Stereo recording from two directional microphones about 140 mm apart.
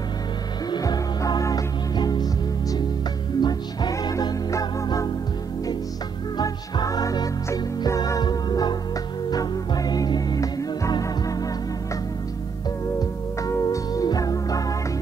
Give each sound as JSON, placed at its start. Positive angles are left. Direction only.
{"t": 0.7, "sound": "music", "side_deg": 25}
{"t": 3.3, "sound": "music", "side_deg": 30}
{"t": 6.3, "sound": "music", "side_deg": 25}
{"t": 13.4, "sound": "music", "side_deg": 25}